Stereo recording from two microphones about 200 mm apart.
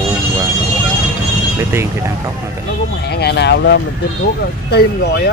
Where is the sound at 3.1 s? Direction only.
55° left (ahead or behind).